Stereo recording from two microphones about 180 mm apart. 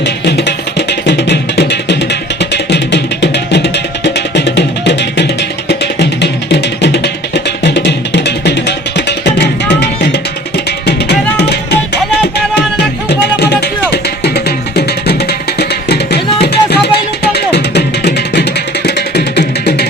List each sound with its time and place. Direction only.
0.0 s music: 70° left (ahead or behind)